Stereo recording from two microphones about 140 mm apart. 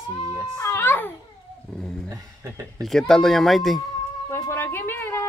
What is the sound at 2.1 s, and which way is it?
Speech, 25° right (ahead or behind).